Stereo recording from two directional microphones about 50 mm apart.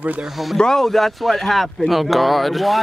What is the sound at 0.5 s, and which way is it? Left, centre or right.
Speech, centre.